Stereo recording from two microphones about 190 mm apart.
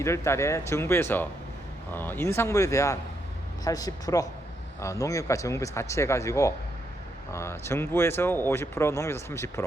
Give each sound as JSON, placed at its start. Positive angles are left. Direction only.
{"t": 0.0, "sound": "speech", "side_deg": 15}